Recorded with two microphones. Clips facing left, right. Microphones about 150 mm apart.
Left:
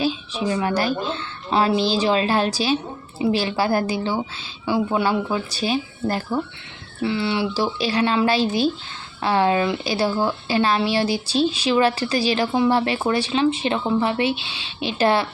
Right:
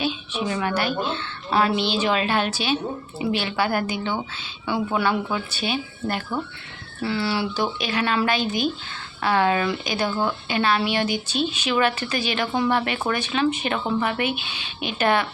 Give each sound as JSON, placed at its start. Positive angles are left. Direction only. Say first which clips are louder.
{"t": 0.0, "sound": "speech", "louder": "left 3 dB", "side_deg": 35}
{"t": 7.0, "sound": "speech", "louder": "left 2 dB", "side_deg": 20}